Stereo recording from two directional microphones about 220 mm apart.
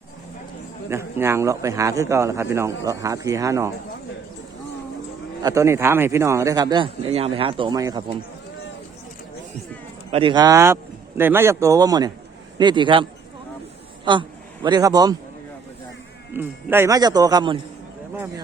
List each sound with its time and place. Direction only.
0.9 s a man's voice: 10° right (ahead or behind)
5.4 s a man's voice: 15° right (ahead or behind)
10.1 s a man's voice: 25° right (ahead or behind)
16.3 s a man's voice: 10° right (ahead or behind)